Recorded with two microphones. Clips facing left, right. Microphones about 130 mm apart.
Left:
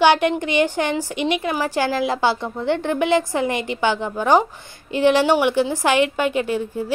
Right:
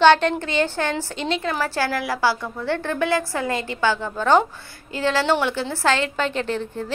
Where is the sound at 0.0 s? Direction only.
10° left (ahead or behind).